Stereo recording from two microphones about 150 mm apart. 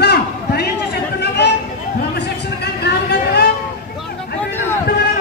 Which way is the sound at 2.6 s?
90° left.